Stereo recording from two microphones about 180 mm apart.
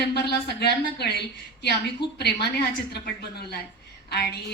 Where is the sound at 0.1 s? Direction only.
65° left (ahead or behind).